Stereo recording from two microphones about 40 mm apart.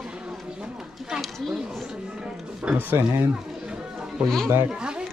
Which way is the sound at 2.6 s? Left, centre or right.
Right.